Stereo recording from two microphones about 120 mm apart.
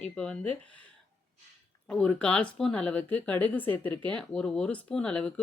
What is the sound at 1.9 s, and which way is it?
Speech, 10° left (ahead or behind).